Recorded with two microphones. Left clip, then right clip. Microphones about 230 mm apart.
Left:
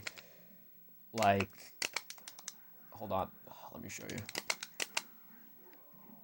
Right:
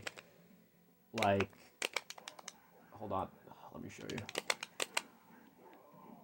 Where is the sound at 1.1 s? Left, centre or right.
Left.